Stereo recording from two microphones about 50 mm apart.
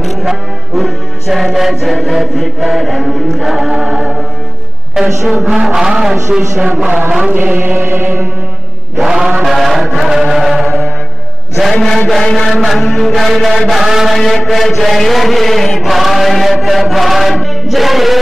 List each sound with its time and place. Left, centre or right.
0.2 s music: centre
3.4 s mantra: centre
7.2 s music: right
8.9 s mantra: centre
11.7 s mantra: centre
14.1 s mantra: centre